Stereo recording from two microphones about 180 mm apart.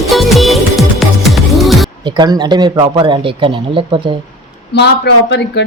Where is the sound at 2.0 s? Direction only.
25° right (ahead or behind).